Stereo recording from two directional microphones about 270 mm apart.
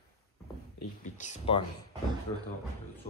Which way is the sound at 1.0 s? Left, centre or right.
Left.